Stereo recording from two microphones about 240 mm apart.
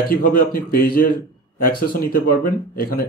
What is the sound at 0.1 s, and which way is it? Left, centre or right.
Speech, left.